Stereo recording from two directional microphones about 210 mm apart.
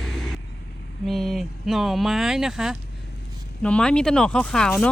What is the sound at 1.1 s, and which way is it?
Speech, centre (ahead or behind).